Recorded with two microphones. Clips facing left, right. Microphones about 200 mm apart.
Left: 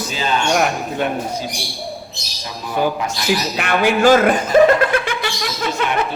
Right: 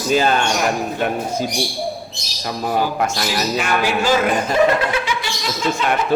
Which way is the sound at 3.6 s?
60° left (ahead or behind).